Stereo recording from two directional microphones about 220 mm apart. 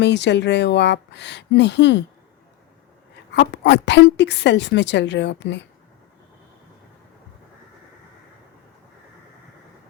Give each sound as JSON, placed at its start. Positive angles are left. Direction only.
{"t": 0.0, "sound": "a woman's voice", "side_deg": 50}
{"t": 3.3, "sound": "a woman's voice", "side_deg": 55}